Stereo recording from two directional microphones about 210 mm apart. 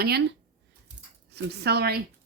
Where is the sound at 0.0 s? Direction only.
50° right (ahead or behind).